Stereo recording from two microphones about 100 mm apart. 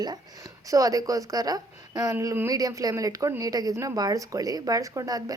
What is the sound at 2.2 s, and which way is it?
Speech, 25° right (ahead or behind).